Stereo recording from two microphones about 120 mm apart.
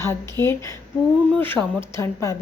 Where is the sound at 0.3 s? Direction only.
20° left (ahead or behind).